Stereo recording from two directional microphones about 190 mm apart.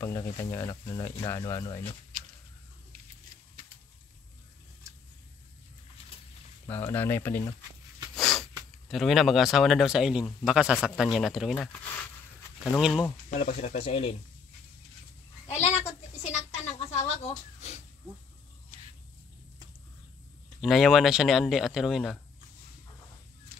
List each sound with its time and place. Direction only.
0.0 s speech: 15° left (ahead or behind)
6.7 s speech: 10° left (ahead or behind)
8.2 s a sound: centre (ahead or behind)
8.8 s speech: centre (ahead or behind)
12.7 s speech: 5° left (ahead or behind)
13.4 s speech: 35° left (ahead or behind)
15.4 s a sound: 35° left (ahead or behind)
20.6 s speech: centre (ahead or behind)